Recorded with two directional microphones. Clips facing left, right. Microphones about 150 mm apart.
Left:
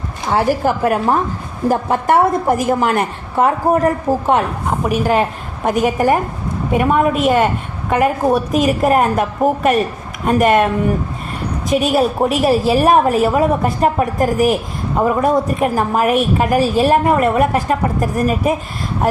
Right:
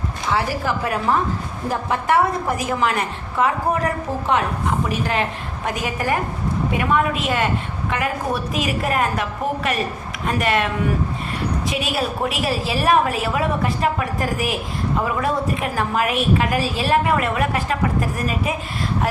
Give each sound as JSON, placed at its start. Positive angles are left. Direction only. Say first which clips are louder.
{"t": 0.3, "sound": "a woman's voice", "louder": "left 7 dB", "side_deg": 45}
{"t": 11.7, "sound": "a woman's voice", "louder": "left 9 dB", "side_deg": 45}